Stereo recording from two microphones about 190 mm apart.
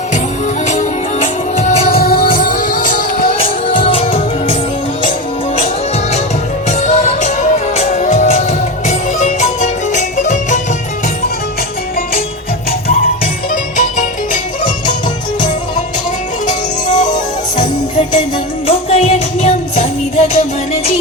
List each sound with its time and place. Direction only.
0.7 s music: 35° left (ahead or behind)
2.2 s music: 50° left (ahead or behind)
3.3 s music: 30° left (ahead or behind)
6.7 s music: 35° left (ahead or behind)
13.5 s music: 40° left (ahead or behind)
17.6 s music: 25° left (ahead or behind)